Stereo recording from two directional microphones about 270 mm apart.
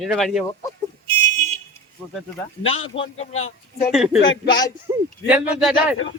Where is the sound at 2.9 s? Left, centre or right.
Centre.